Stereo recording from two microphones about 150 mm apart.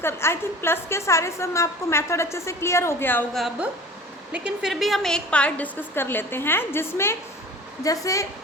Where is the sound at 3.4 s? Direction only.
Centre (ahead or behind).